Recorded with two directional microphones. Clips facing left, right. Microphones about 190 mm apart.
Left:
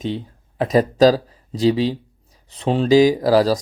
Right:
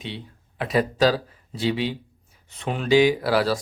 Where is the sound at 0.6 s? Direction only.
40° left (ahead or behind).